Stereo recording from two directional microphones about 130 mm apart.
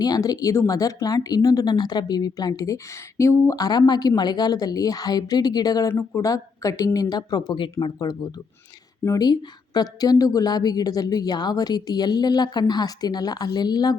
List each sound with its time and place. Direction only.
0.0 s a woman's voice: 30° left (ahead or behind)